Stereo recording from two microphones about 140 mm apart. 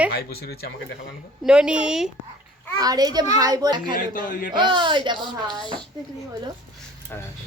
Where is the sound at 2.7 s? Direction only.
25° right (ahead or behind).